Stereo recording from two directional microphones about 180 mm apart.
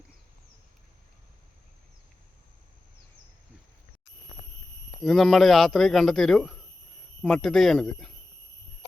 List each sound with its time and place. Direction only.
5.0 s speech: centre (ahead or behind)